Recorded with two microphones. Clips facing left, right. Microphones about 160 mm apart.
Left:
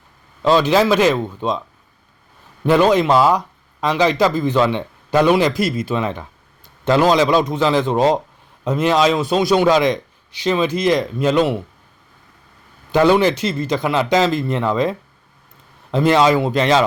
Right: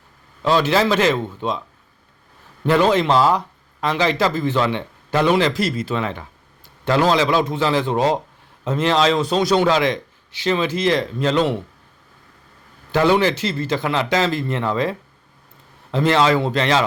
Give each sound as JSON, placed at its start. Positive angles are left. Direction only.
{"t": 0.4, "sound": "speech", "side_deg": 15}
{"t": 2.6, "sound": "a man's voice", "side_deg": 15}
{"t": 12.9, "sound": "speech", "side_deg": 15}